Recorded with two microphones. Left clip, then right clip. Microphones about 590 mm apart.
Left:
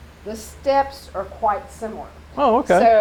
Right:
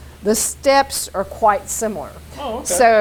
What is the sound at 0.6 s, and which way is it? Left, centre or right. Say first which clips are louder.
Speech: right 3 dB; right.